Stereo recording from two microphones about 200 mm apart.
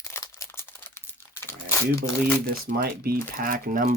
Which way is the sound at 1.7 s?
10° left (ahead or behind).